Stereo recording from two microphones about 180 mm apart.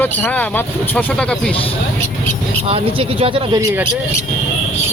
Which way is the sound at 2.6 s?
30° right (ahead or behind).